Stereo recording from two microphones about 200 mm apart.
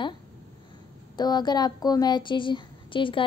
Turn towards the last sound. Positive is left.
turn(degrees=25)  # may be behind; listen again after turning